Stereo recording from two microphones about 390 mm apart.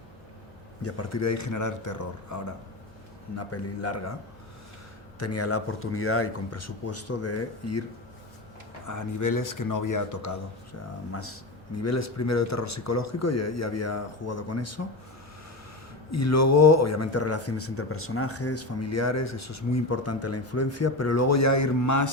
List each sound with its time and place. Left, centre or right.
0.8 s a man's voice: left
3.3 s speech: left
5.2 s speech: left
8.9 s a man's voice: left
11.1 s speech: left
16.1 s speech: left